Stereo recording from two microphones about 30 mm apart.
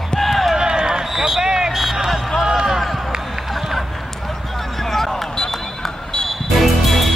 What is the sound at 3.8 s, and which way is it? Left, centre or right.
Basketball bounce, centre.